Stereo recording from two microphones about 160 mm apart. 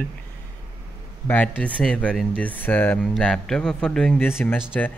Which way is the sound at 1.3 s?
10° left (ahead or behind).